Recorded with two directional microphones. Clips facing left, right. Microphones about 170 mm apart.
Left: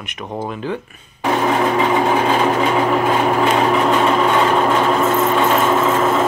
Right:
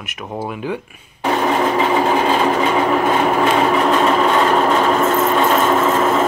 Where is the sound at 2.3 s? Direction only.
5° left (ahead or behind).